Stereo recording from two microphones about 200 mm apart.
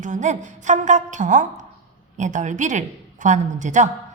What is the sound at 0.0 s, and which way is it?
A woman's voice, 40° right (ahead or behind).